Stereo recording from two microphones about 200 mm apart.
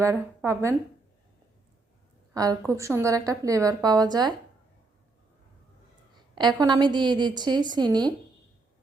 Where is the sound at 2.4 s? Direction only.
15° right (ahead or behind).